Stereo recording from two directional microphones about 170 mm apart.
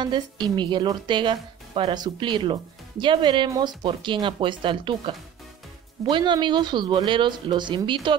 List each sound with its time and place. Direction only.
0.0 s a woman's voice: 25° right (ahead or behind)